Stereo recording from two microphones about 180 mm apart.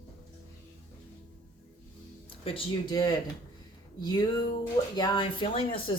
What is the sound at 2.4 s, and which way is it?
Speech, 25° left (ahead or behind).